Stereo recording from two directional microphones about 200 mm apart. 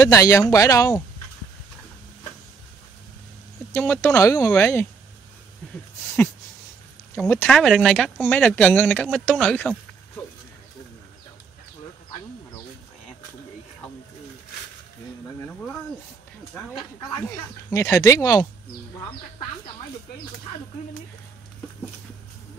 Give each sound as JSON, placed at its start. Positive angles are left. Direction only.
{"t": 0.0, "sound": "speech", "side_deg": 15}
{"t": 3.7, "sound": "speech", "side_deg": 10}
{"t": 7.2, "sound": "speech", "side_deg": 10}
{"t": 17.2, "sound": "speech", "side_deg": 10}